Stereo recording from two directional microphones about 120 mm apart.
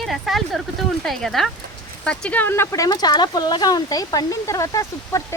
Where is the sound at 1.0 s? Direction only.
Centre (ahead or behind).